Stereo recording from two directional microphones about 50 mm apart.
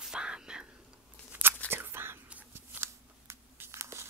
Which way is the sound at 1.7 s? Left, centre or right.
Right.